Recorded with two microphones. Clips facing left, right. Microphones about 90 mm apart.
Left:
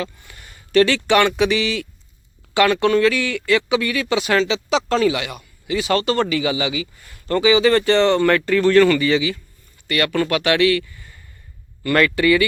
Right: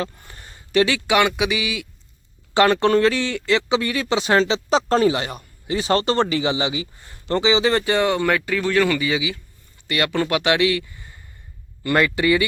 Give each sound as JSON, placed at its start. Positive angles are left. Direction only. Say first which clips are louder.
{"t": 0.0, "sound": "a sound", "louder": "even", "side_deg": -35}
{"t": 0.7, "sound": "speech", "louder": "left 3 dB", "side_deg": -15}
{"t": 2.6, "sound": "a man's voice", "louder": "even", "side_deg": -35}